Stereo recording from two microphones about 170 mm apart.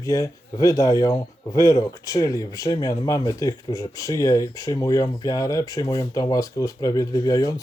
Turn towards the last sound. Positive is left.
turn(degrees=20)  # may be behind; listen again after turning